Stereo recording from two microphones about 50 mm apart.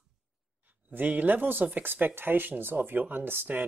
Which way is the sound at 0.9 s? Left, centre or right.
Right.